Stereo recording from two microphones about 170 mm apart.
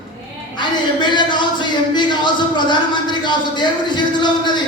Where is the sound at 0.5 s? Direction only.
25° left (ahead or behind).